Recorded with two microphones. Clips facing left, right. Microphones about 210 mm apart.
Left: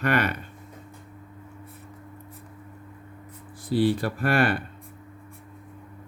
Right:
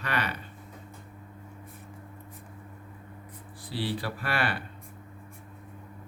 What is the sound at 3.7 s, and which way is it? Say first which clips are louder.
Speech: left 10 dB; 50° left (ahead or behind).